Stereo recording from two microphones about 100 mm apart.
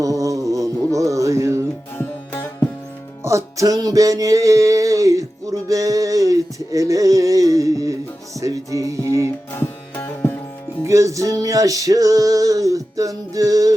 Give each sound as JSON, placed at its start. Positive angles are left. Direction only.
{"t": 0.0, "sound": "music", "side_deg": -35}
{"t": 2.0, "sound": "music", "side_deg": 20}
{"t": 3.2, "sound": "music", "side_deg": -30}
{"t": 9.6, "sound": "music", "side_deg": 20}
{"t": 10.8, "sound": "music", "side_deg": -30}